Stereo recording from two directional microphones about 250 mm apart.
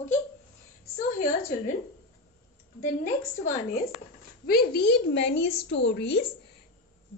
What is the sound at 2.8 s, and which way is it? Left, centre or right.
A woman's voice, left.